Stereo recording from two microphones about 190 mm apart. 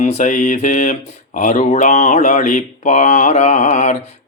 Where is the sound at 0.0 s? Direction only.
35° left (ahead or behind).